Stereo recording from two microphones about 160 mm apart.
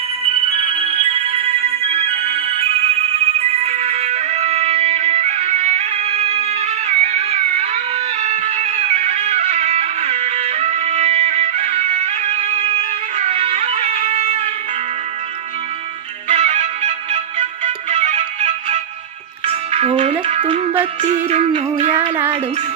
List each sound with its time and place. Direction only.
0.6 s music: 35° right (ahead or behind)
16.3 s music: 40° right (ahead or behind)